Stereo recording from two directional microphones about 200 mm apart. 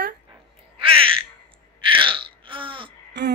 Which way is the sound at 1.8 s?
25° right (ahead or behind).